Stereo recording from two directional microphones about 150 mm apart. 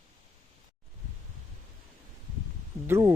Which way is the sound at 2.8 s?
15° right (ahead or behind).